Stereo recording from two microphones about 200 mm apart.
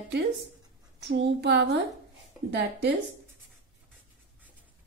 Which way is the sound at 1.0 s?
60° right (ahead or behind).